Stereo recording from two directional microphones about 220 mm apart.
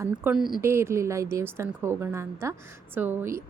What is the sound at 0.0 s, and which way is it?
Speech, 5° right (ahead or behind).